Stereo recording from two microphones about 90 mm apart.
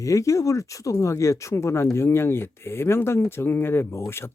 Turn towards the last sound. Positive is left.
turn(degrees=30)  # may be behind; listen again after turning